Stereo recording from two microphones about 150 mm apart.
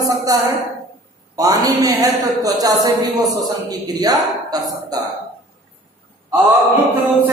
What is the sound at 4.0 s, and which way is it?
A man's voice, 25° right (ahead or behind).